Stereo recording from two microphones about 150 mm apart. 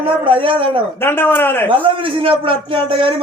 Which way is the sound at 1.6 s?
35° right (ahead or behind).